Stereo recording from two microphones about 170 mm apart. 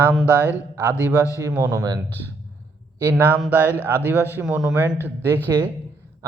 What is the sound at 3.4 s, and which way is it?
A man's voice, 10° right (ahead or behind).